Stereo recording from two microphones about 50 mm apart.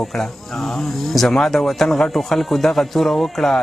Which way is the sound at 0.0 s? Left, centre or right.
Centre.